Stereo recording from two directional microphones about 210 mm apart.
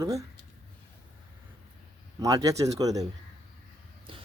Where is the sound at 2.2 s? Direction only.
15° right (ahead or behind).